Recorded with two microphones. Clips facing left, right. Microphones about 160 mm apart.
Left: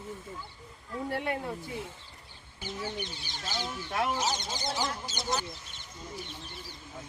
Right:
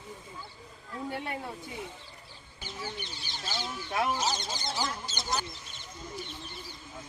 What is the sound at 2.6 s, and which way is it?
Speech, 15° left (ahead or behind).